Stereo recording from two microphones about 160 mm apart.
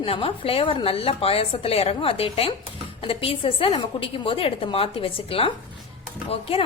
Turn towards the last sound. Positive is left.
turn(degrees=35)  # may be behind; listen again after turning